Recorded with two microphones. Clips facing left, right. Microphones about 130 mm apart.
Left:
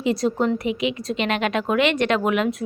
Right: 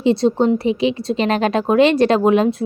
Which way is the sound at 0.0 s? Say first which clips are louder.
Right 6 dB; 30° right (ahead or behind).